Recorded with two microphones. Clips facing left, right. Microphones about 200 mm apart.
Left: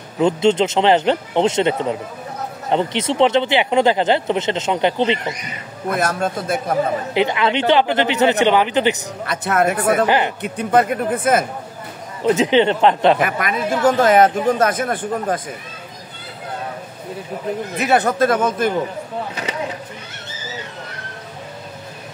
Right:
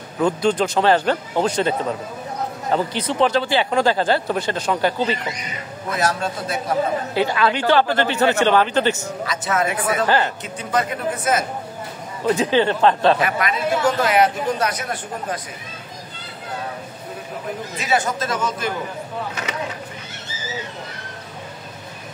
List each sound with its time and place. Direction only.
0.2 s speech: 25° left (ahead or behind)
5.9 s speech: 55° left (ahead or behind)
7.2 s speech: 20° left (ahead or behind)
9.2 s speech: 60° left (ahead or behind)
10.0 s speech: 15° left (ahead or behind)
10.4 s speech: 55° left (ahead or behind)
12.2 s speech: 20° left (ahead or behind)
13.2 s speech: 50° left (ahead or behind)
17.7 s speech: 60° left (ahead or behind)